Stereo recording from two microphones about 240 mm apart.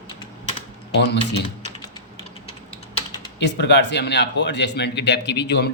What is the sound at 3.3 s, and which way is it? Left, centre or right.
Speech, left.